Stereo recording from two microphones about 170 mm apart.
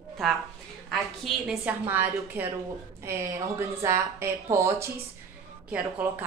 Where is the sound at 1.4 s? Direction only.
10° right (ahead or behind).